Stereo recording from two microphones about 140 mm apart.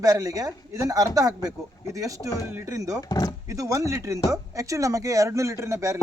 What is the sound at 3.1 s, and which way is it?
Speech, 30° left (ahead or behind).